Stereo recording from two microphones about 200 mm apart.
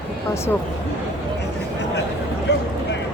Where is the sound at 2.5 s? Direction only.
60° left (ahead or behind).